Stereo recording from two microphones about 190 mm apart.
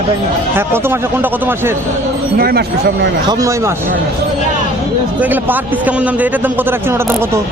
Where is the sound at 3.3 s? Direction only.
15° right (ahead or behind).